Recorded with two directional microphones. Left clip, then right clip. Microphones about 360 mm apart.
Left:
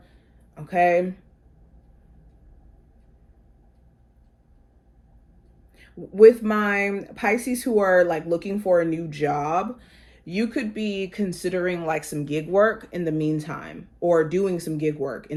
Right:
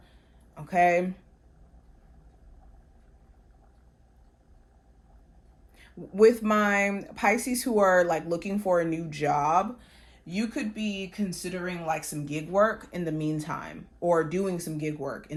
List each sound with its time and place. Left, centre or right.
0.5 s speech: right
5.7 s speech: right